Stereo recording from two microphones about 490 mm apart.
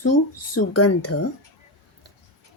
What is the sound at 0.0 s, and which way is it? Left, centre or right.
Speech, left.